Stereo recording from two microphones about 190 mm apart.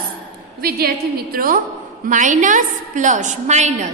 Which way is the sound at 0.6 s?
55° right (ahead or behind).